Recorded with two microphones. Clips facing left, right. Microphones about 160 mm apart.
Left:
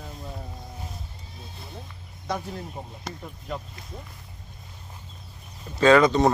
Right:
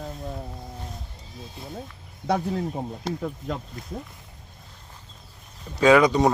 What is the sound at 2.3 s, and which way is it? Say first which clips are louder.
Speech: right 7 dB; 65° right (ahead or behind).